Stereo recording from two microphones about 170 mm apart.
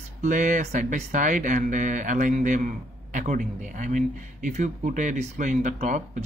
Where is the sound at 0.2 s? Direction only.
45° right (ahead or behind).